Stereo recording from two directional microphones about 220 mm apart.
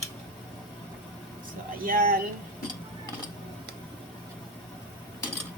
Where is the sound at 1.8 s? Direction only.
40° right (ahead or behind).